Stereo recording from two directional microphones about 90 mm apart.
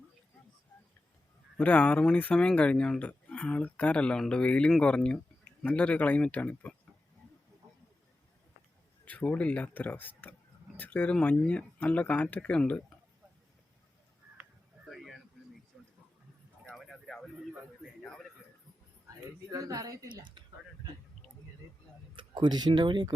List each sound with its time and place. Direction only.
1.5 s speech: 15° left (ahead or behind)
9.0 s speech: 15° left (ahead or behind)
14.8 s a sound: centre (ahead or behind)
19.0 s a woman's voice: 35° right (ahead or behind)
22.1 s speech: 65° right (ahead or behind)